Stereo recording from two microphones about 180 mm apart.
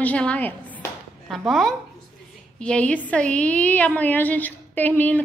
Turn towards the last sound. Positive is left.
turn(degrees=10)  # may be behind; listen again after turning